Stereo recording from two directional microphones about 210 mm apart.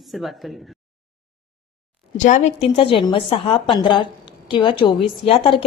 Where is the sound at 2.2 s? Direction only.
35° left (ahead or behind).